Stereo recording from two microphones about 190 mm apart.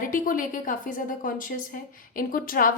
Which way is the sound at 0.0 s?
45° left (ahead or behind).